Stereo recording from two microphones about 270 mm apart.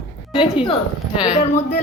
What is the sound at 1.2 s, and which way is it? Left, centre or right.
Speech, centre.